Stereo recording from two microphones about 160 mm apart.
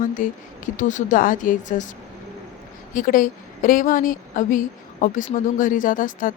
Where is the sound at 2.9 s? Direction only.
60° left (ahead or behind).